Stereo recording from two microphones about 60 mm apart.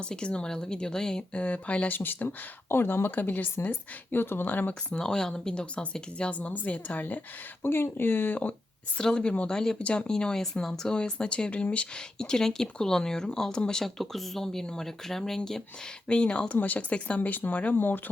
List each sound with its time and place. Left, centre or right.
0.0 s speech: centre
4.9 s speech: centre; by 7.2 s left
7.6 s speech: left
9.0 s speech: centre
10.1 s speech: centre; by 18.0 s left